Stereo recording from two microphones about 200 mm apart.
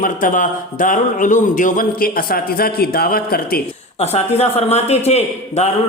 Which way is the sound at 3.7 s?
30° left (ahead or behind).